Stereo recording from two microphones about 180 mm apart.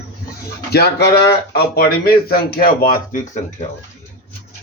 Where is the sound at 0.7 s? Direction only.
60° left (ahead or behind).